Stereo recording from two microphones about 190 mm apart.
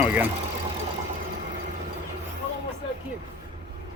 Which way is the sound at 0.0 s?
10° right (ahead or behind).